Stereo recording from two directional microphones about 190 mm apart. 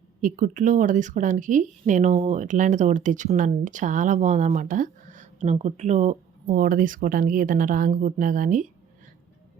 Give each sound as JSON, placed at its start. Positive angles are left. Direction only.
{"t": 0.2, "sound": "speech", "side_deg": -45}